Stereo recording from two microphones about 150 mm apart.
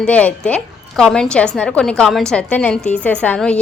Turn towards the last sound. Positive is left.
turn(degrees=10)  # may be behind; listen again after turning